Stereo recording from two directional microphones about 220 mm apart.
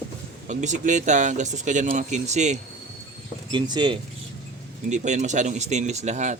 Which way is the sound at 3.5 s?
20° right (ahead or behind).